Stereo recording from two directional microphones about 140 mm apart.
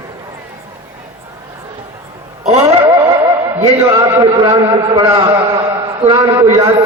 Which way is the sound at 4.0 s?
30° right (ahead or behind).